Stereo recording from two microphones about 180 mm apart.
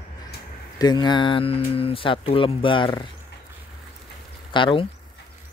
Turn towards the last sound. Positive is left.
turn(degrees=25)  # may be behind; listen again after turning